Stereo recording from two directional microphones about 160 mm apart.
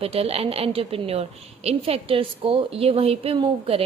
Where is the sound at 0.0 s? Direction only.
40° right (ahead or behind).